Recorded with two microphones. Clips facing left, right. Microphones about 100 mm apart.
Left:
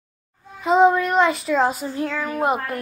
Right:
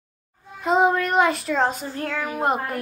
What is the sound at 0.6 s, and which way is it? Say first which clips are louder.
Speech: left 3 dB; centre (ahead or behind).